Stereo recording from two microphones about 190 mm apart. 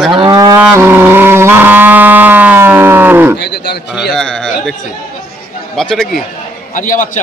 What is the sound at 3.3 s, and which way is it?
Speech, 60° left (ahead or behind).